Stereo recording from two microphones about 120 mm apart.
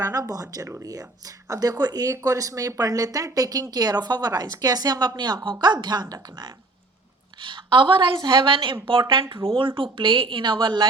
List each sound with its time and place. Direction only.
0.0 s a woman's voice: 30° right (ahead or behind)